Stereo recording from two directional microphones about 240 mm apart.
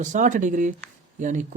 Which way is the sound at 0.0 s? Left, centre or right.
Right.